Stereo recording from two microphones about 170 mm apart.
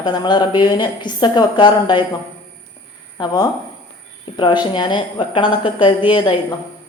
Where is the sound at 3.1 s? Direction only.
25° left (ahead or behind).